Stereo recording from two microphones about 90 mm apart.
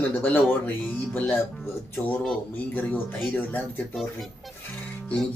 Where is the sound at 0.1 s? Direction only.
20° left (ahead or behind).